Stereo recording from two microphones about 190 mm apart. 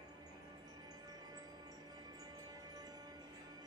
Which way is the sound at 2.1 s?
20° right (ahead or behind).